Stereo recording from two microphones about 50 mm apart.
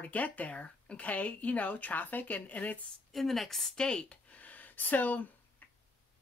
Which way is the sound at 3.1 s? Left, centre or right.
Centre.